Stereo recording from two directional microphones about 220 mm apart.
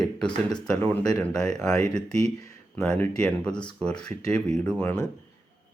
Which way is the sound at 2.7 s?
5° left (ahead or behind).